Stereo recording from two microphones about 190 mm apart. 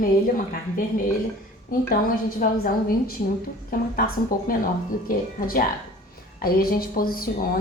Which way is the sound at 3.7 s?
50° left (ahead or behind).